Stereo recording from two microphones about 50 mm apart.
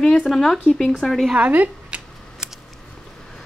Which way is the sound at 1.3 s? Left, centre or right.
Right.